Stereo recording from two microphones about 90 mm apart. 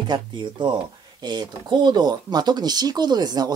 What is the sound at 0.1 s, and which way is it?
Speech, 60° right (ahead or behind).